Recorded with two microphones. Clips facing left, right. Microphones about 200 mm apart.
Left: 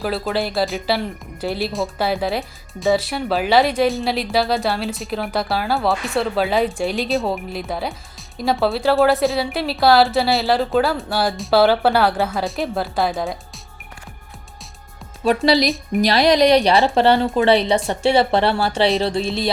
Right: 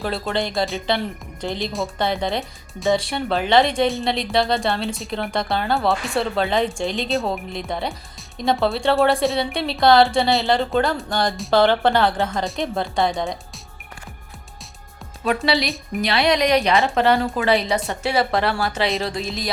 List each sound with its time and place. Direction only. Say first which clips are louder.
0.0 s speech: left 2 dB; centre (ahead or behind)
15.4 s speech: left 5 dB; 35° left (ahead or behind)